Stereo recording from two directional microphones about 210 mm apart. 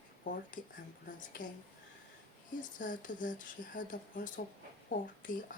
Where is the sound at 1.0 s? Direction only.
40° left (ahead or behind).